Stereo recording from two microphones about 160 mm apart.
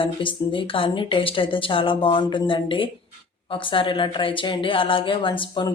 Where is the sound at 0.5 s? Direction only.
35° left (ahead or behind).